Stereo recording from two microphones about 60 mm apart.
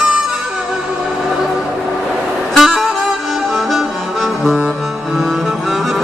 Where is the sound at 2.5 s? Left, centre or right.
Centre.